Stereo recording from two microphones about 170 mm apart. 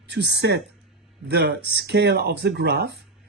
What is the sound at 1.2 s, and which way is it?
Speech, 80° right.